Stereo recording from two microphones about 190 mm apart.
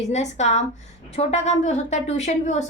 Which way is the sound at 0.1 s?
35° left (ahead or behind).